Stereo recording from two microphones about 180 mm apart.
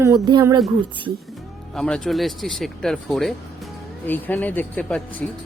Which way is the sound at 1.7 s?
5° left (ahead or behind).